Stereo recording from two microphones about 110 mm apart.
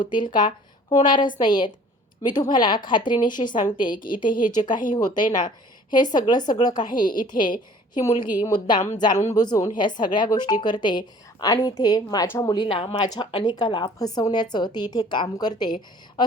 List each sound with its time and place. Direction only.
0.0 s a woman's voice: 45° left (ahead or behind); by 12.6 s 30° left (ahead or behind)
12.6 s a woman's voice: 55° left (ahead or behind)
13.0 s speech: 40° left (ahead or behind)